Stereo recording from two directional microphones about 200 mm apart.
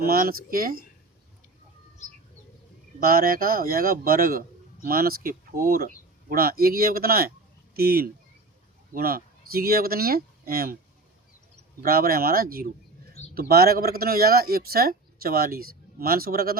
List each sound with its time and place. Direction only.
0.0 s a man's voice: 50° right (ahead or behind)
2.0 s bird: 35° left (ahead or behind)
3.1 s a man's voice: 45° right (ahead or behind)
11.8 s a man's voice: 50° right (ahead or behind)
13.2 s bird: 35° left (ahead or behind)
13.5 s a man's voice: 50° right (ahead or behind)